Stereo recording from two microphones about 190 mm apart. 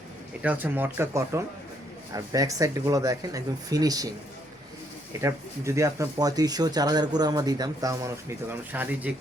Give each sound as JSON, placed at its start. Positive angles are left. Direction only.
{"t": 0.4, "sound": "speech", "side_deg": -10}
{"t": 5.2, "sound": "speech", "side_deg": -15}